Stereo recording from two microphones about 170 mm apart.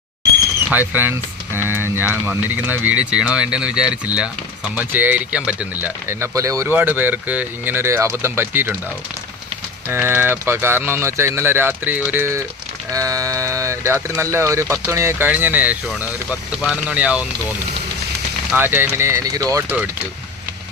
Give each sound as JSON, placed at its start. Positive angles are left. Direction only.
{"t": 0.7, "sound": "speech", "side_deg": -10}
{"t": 9.8, "sound": "speech", "side_deg": -15}
{"t": 18.5, "sound": "speech", "side_deg": -10}